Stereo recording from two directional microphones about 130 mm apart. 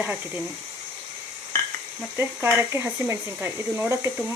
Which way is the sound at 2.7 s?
20° right (ahead or behind).